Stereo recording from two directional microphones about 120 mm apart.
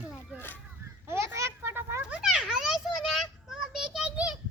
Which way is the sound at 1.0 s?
20° right (ahead or behind).